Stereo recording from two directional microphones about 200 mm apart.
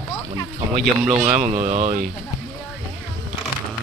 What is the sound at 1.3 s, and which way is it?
Speech, 35° right (ahead or behind).